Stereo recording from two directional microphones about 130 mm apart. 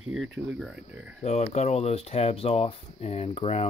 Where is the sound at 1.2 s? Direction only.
60° left (ahead or behind).